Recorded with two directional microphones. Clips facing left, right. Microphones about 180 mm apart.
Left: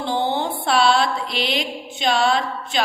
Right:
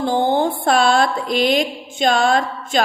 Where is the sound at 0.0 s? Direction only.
45° right (ahead or behind).